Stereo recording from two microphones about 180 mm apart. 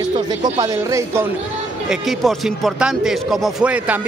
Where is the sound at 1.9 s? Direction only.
Centre (ahead or behind).